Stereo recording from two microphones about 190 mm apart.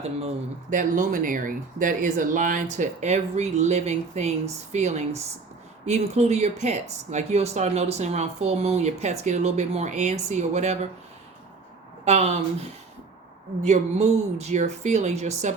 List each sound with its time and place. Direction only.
0.0 s speech: 35° right (ahead or behind)
12.0 s speech: 35° right (ahead or behind)
13.6 s speech: 35° right (ahead or behind)